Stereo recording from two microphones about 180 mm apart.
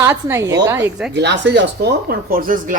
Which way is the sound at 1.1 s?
70° right (ahead or behind).